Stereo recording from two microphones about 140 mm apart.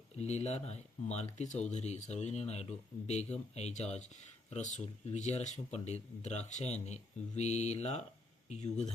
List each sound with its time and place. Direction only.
0.2 s speech: 50° left (ahead or behind)